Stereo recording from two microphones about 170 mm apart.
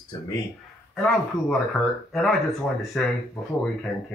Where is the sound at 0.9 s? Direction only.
5° left (ahead or behind).